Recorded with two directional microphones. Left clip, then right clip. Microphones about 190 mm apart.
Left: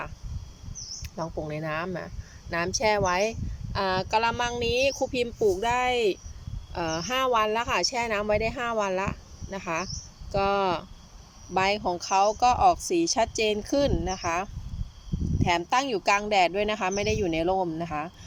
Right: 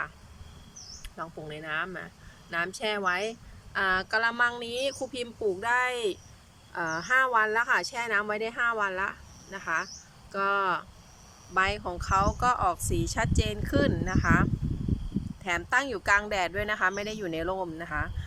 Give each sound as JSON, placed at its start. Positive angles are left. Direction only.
{"t": 1.0, "sound": "speech", "side_deg": 20}